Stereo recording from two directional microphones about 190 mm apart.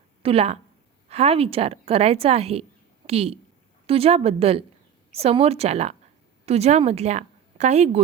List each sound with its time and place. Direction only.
0.2 s a woman's voice: 30° right (ahead or behind)